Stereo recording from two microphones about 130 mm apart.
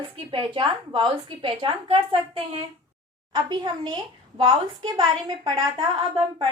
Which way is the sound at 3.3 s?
35° right (ahead or behind).